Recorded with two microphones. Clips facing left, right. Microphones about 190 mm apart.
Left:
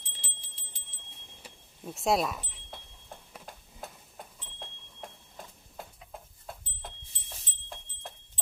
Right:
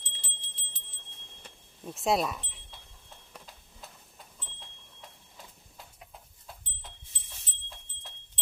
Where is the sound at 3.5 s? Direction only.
55° left (ahead or behind).